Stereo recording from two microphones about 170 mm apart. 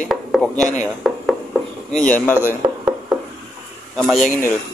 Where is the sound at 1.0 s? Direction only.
Centre (ahead or behind).